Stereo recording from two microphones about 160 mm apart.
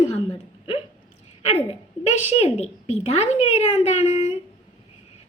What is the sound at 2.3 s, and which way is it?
A woman's voice, 40° left (ahead or behind).